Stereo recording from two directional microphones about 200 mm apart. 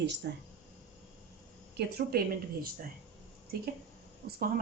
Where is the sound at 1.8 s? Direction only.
55° right (ahead or behind).